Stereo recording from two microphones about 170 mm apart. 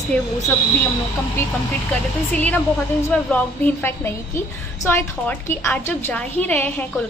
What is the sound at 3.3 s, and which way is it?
A woman's voice, 10° left (ahead or behind).